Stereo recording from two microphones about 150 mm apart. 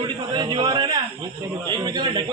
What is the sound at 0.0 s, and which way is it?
A man's voice, 30° right (ahead or behind).